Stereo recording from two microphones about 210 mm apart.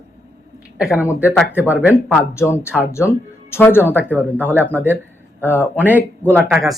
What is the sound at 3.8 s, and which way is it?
Speech, 10° right (ahead or behind).